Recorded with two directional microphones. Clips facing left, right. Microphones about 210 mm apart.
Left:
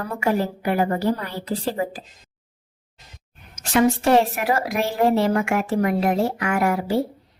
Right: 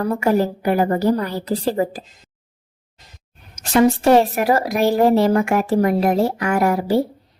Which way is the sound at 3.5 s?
35° right (ahead or behind).